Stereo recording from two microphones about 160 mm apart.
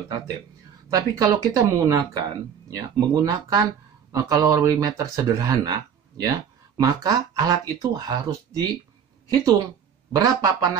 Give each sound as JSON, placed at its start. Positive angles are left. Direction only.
{"t": 0.8, "sound": "speech", "side_deg": -20}